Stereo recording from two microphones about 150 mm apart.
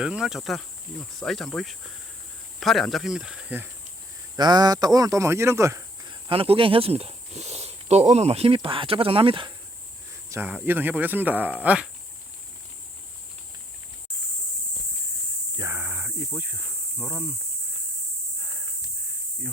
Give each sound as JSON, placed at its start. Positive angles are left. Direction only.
{"t": 0.0, "sound": "speech", "side_deg": -5}
{"t": 2.6, "sound": "speech", "side_deg": 0}
{"t": 4.4, "sound": "speech", "side_deg": -25}
{"t": 6.1, "sound": "speech", "side_deg": -35}
{"t": 10.2, "sound": "speech", "side_deg": -20}
{"t": 15.5, "sound": "a sound", "side_deg": -15}
{"t": 16.4, "sound": "speech", "side_deg": -10}
{"t": 17.0, "sound": "speech", "side_deg": 0}